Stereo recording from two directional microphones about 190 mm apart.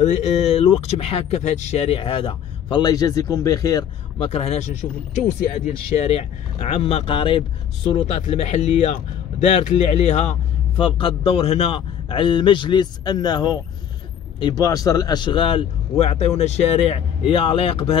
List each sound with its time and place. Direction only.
0.0 s speech: 35° left (ahead or behind); by 3.8 s 20° left (ahead or behind)
4.2 s speech: 35° left (ahead or behind)